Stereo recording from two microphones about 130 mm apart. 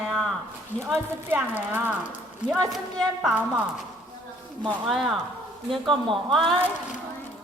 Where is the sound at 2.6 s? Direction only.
Centre (ahead or behind).